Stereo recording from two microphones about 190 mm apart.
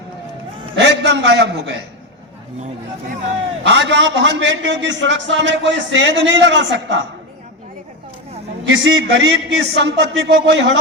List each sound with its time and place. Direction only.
0.8 s a man's voice: 70° right (ahead or behind)
3.7 s a man's voice: 70° right (ahead or behind)
8.6 s a man's voice: 80° right